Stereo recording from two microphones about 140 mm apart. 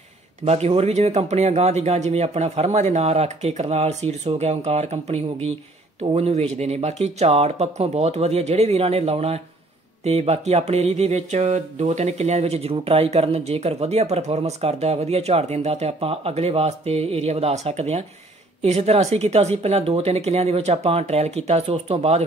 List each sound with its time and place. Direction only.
0.5 s speech: 45° right (ahead or behind)